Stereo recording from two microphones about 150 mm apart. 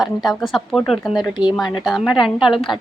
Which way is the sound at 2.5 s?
35° left (ahead or behind).